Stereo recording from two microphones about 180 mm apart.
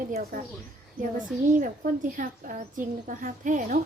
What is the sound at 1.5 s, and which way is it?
A woman's voice, 45° right (ahead or behind).